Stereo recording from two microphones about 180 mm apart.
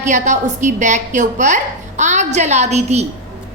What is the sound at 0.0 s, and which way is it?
A woman's voice, 40° right (ahead or behind).